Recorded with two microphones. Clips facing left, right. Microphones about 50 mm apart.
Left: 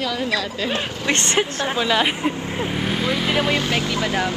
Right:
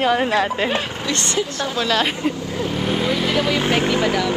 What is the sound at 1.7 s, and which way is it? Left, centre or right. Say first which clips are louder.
Speech: even; centre.